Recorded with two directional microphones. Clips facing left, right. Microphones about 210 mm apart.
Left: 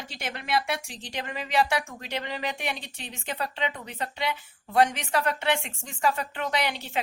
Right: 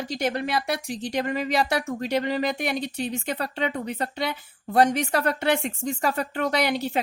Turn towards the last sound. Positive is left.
turn(degrees=-40)  # may be behind; listen again after turning